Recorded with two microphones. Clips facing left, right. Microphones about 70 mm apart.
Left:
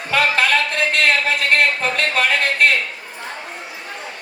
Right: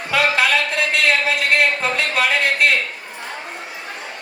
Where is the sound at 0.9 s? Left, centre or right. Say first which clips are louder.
Even; left.